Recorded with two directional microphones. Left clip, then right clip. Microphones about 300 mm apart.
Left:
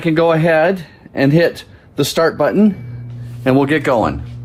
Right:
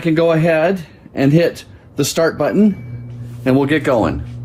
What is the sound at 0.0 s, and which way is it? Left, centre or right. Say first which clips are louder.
A man's voice: left 1 dB; left.